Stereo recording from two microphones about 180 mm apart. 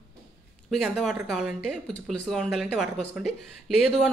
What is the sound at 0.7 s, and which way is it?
Speech, centre (ahead or behind).